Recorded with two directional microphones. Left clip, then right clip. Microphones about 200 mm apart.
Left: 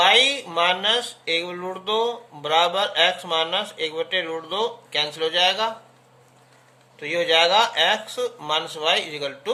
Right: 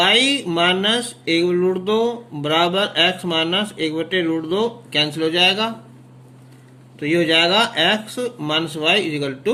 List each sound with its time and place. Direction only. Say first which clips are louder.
0.0 s speech: right 1 dB; 20° right (ahead or behind)
7.0 s speech: right 3 dB; 20° right (ahead or behind)